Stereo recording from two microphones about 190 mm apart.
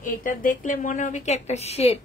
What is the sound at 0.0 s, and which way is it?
A woman's voice, 45° left (ahead or behind).